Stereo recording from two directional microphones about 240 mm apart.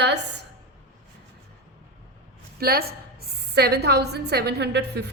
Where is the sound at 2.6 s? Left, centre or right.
Right.